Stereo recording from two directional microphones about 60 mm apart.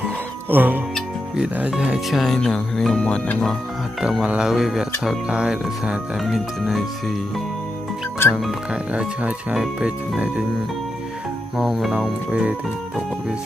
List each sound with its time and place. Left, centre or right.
0.5 s speech: right
1.7 s speech: centre
2.0 s music: centre
2.4 s speech: centre
3.0 s speech: centre
4.5 s music: centre
5.0 s speech: centre
6.2 s music: centre
8.3 s music: centre
8.9 s speech: centre
11.5 s music: centre
12.3 s speech: centre